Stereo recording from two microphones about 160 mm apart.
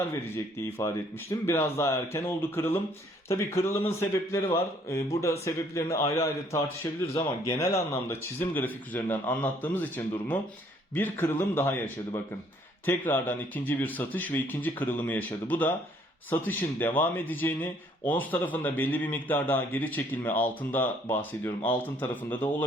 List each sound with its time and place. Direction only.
1.3 s a man's voice: 15° left (ahead or behind)